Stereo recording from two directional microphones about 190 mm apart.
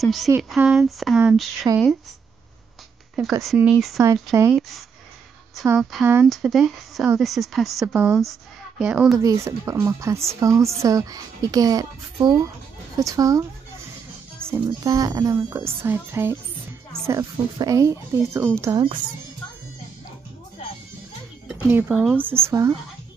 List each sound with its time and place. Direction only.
0.0 s speech: centre (ahead or behind)
4.0 s speech: 15° right (ahead or behind)
5.8 s speech: centre (ahead or behind)
9.2 s a woman's voice: 15° right (ahead or behind)
14.5 s speech: 20° right (ahead or behind)
21.5 s speech: 10° right (ahead or behind)